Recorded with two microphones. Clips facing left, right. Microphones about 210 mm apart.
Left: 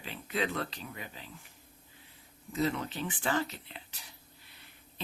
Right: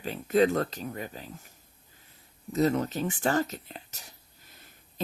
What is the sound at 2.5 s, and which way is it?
Speech, 40° right (ahead or behind).